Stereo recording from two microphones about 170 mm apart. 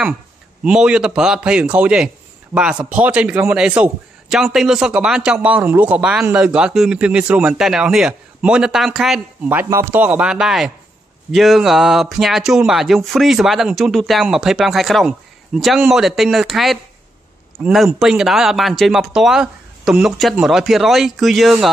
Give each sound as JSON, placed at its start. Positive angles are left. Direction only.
{"t": 0.7, "sound": "speech", "side_deg": -5}
{"t": 9.6, "sound": "speech", "side_deg": -15}
{"t": 17.6, "sound": "speech", "side_deg": 0}